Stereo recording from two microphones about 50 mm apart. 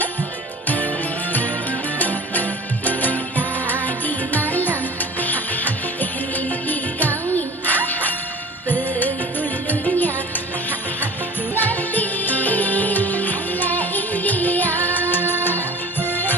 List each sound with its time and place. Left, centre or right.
0.7 s music: left
11.5 s music: left